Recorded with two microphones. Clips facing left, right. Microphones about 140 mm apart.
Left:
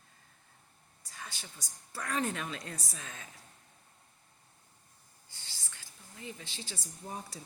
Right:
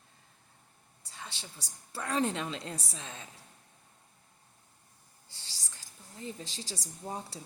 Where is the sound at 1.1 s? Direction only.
25° right (ahead or behind).